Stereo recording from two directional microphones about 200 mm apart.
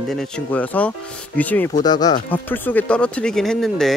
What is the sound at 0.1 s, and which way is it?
Speech, 5° left (ahead or behind).